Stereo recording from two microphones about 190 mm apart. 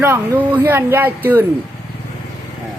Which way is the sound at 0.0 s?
10° right (ahead or behind).